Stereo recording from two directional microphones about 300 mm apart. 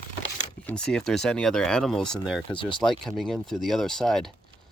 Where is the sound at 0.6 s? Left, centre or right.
Centre.